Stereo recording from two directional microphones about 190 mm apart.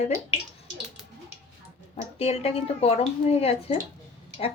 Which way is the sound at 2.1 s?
30° left (ahead or behind).